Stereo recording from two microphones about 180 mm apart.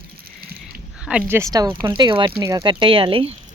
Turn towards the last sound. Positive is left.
turn(degrees=-30)  # may be behind; listen again after turning